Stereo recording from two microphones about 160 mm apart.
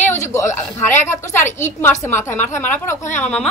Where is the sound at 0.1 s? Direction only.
20° left (ahead or behind).